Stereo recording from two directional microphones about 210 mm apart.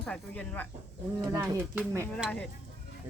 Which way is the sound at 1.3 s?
10° right (ahead or behind).